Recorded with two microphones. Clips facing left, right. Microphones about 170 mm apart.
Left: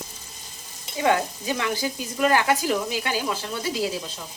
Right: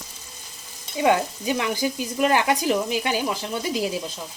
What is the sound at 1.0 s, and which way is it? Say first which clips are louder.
Speech: right 2 dB; 20° right (ahead or behind).